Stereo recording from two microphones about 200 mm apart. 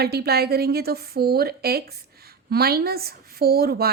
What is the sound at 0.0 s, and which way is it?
A woman's voice, 55° right (ahead or behind).